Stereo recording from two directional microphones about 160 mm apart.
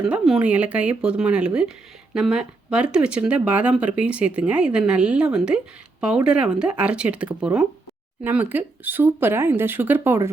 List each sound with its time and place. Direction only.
0.0 s speech: 5° right (ahead or behind)